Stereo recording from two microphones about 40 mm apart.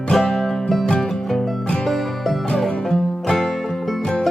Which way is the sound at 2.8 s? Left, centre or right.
Centre.